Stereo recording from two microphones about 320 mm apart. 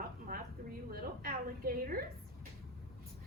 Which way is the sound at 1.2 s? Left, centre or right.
Right.